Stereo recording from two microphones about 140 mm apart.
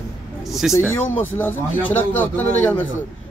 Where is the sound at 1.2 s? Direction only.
15° left (ahead or behind).